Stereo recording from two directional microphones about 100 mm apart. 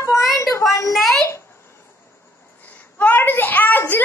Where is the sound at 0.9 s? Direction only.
Centre (ahead or behind).